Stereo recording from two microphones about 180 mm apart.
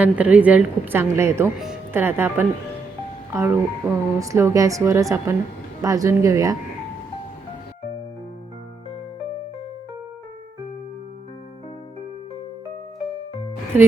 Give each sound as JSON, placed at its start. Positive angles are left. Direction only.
{"t": 0.0, "sound": "a woman's voice", "side_deg": -10}